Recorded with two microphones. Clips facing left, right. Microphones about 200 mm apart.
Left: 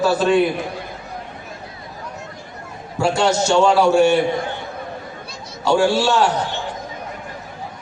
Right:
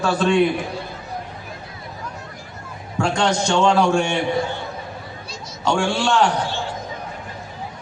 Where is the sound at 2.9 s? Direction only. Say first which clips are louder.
Left 3 dB; 5° left (ahead or behind).